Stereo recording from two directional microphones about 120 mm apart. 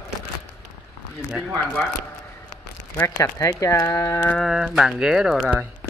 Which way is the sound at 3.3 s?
30° left (ahead or behind).